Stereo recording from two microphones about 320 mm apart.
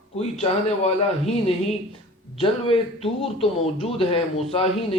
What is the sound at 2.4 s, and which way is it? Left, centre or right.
Speech, centre.